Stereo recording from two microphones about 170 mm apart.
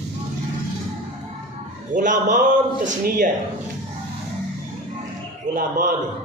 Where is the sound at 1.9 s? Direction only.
50° right (ahead or behind).